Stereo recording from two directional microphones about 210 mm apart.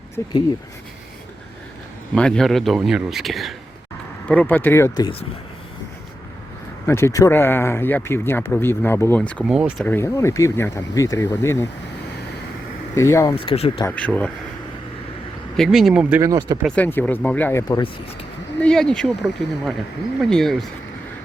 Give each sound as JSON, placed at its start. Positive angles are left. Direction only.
{"t": 0.2, "sound": "speech", "side_deg": 15}
{"t": 2.1, "sound": "speech", "side_deg": 5}
{"t": 6.8, "sound": "speech", "side_deg": 10}
{"t": 9.8, "sound": "speech", "side_deg": 10}
{"t": 12.9, "sound": "speech", "side_deg": 15}
{"t": 13.3, "sound": "speech", "side_deg": 25}
{"t": 13.8, "sound": "speech", "side_deg": 5}
{"t": 15.5, "sound": "speech", "side_deg": 0}
{"t": 16.6, "sound": "speech", "side_deg": 5}
{"t": 18.6, "sound": "speech", "side_deg": 5}